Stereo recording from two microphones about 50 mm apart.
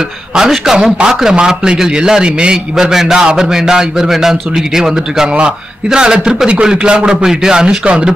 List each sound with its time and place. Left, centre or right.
0.4 s a man's voice: centre
0.9 s a man's voice: centre